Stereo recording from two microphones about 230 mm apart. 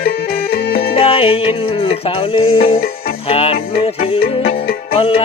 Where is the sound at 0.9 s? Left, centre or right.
Left.